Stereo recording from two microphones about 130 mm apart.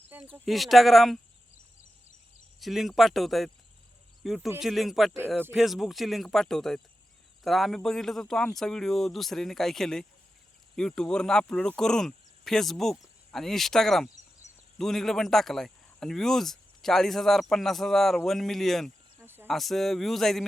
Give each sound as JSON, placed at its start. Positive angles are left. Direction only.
{"t": 0.4, "sound": "speech", "side_deg": 0}
{"t": 2.6, "sound": "speech", "side_deg": 0}
{"t": 4.2, "sound": "cricket", "side_deg": 0}
{"t": 4.6, "sound": "speech", "side_deg": 0}
{"t": 19.2, "sound": "cricket", "side_deg": -15}
{"t": 19.5, "sound": "speech", "side_deg": 0}